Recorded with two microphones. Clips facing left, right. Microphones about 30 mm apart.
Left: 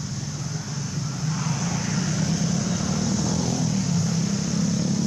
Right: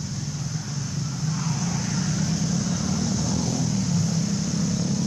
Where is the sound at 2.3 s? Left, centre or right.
Centre.